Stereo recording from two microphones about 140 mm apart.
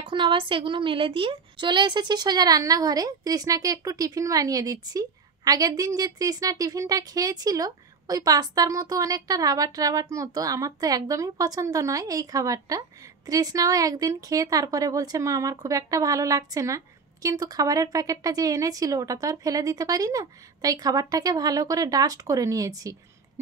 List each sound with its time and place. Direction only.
0.0 s a woman's voice: 35° right (ahead or behind)